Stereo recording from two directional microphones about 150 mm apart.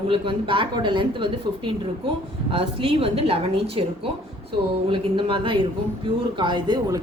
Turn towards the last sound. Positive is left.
turn(degrees=-25)  # may be behind; listen again after turning